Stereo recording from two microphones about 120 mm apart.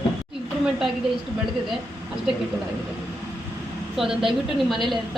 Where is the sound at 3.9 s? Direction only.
Centre (ahead or behind).